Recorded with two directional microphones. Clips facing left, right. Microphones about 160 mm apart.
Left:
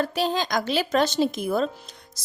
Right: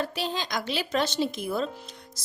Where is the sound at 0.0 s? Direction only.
45° left (ahead or behind).